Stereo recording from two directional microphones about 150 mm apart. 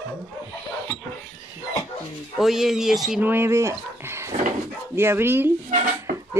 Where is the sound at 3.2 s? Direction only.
15° right (ahead or behind).